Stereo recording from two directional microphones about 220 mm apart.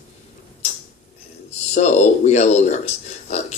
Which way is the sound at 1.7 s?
30° left (ahead or behind).